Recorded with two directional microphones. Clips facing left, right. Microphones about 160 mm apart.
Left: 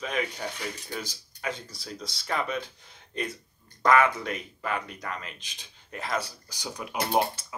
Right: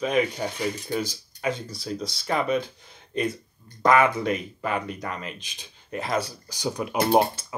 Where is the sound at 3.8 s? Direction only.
15° right (ahead or behind).